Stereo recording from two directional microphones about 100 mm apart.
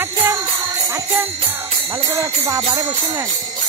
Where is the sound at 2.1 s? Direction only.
30° right (ahead or behind).